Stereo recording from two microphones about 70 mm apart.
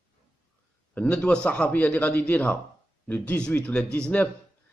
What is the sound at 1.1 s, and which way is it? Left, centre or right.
A man's voice, centre.